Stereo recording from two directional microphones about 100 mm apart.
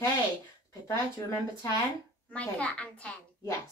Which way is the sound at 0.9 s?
35° left (ahead or behind).